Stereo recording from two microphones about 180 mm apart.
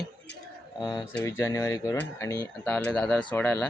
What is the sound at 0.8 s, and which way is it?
Speech, 25° left (ahead or behind).